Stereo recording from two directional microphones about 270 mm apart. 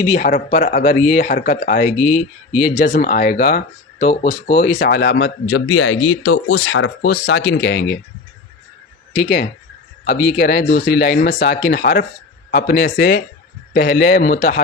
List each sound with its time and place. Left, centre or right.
0.0 s speech: left
10.3 s speech: left